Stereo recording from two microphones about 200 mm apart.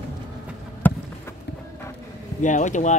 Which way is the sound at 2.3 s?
40° left (ahead or behind).